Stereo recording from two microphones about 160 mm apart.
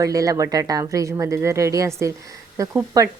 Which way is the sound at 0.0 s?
20° right (ahead or behind).